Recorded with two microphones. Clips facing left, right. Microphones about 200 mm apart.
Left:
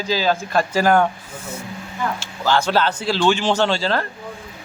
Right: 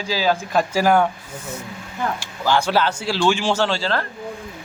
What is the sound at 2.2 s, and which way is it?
A man's voice, 15° right (ahead or behind).